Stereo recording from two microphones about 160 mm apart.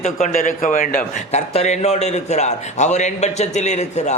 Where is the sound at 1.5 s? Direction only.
45° left (ahead or behind).